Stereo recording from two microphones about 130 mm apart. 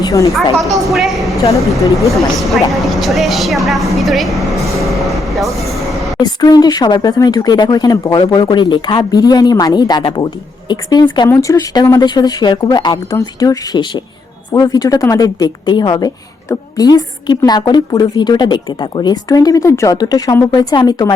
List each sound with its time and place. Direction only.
0.0 s a sound: 25° left (ahead or behind)
0.5 s a woman's voice: centre (ahead or behind)
3.9 s train: centre (ahead or behind)
6.2 s a woman's voice: 30° left (ahead or behind)
11.3 s a woman's voice: 25° left (ahead or behind)